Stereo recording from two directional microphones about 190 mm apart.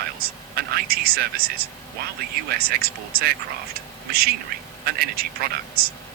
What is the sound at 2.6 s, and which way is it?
Speech, 55° right (ahead or behind).